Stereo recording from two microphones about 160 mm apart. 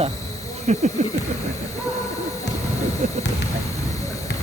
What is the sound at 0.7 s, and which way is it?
Snake, 45° right (ahead or behind).